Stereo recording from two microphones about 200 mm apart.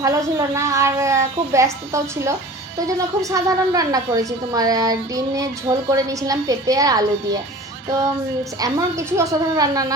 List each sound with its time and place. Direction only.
0.0 s a woman's voice: 15° right (ahead or behind)
8.5 s a woman's voice: 15° right (ahead or behind)